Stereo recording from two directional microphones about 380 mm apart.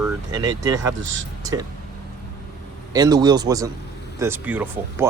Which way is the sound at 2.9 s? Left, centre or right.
Centre.